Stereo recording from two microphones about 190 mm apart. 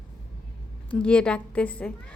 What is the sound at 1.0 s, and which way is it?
A woman's voice, 5° left (ahead or behind).